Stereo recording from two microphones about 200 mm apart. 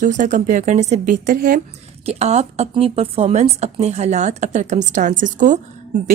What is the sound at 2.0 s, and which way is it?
Speech, 35° right (ahead or behind).